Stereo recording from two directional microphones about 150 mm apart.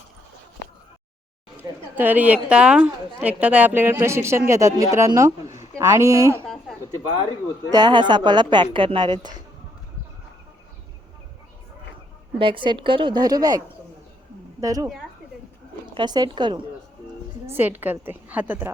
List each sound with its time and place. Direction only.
2.0 s a woman's voice: 10° right (ahead or behind)
6.4 s a sound: centre (ahead or behind)
7.7 s speech: 30° right (ahead or behind)
12.4 s speech: 35° right (ahead or behind)
14.6 s a woman's voice: 25° right (ahead or behind)
16.0 s speech: 30° right (ahead or behind)
17.4 s a woman's voice: 15° right (ahead or behind)